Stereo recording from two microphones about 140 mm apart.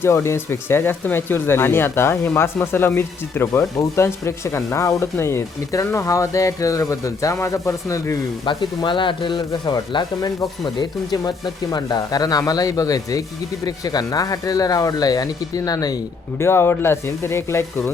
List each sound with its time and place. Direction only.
0.0 s speech: 20° left (ahead or behind)
8.4 s speech: 35° left (ahead or behind); by 17.9 s 15° left (ahead or behind)